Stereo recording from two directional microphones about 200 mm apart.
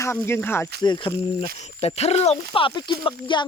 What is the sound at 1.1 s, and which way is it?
Speech, 55° right (ahead or behind).